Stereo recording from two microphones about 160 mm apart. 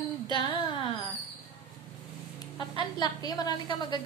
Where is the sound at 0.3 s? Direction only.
30° left (ahead or behind).